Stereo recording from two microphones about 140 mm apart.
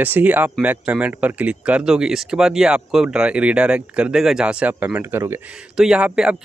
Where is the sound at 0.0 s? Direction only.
10° right (ahead or behind).